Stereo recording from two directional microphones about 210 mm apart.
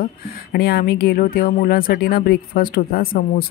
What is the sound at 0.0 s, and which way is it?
Speech, 45° left (ahead or behind).